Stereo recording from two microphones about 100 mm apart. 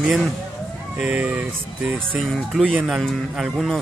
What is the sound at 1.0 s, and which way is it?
Speech, 15° right (ahead or behind).